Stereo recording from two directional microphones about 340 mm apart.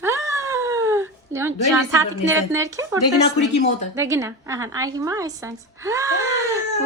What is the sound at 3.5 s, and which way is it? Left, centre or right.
Speech, centre.